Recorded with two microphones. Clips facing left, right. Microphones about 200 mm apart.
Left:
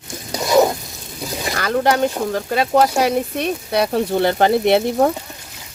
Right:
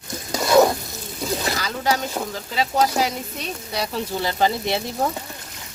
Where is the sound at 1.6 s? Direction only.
60° left (ahead or behind).